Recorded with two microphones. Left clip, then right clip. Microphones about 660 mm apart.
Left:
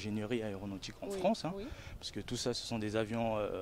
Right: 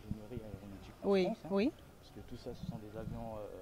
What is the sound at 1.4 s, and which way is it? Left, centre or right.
Speech, left.